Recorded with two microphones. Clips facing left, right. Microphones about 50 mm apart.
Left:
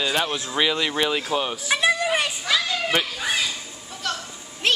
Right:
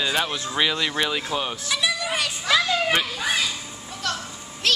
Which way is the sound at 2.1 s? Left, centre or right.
Left.